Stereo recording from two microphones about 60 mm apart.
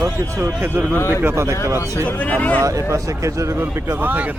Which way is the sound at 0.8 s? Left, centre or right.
Right.